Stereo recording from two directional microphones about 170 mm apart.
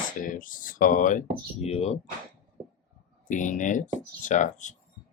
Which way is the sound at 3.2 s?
45° left (ahead or behind).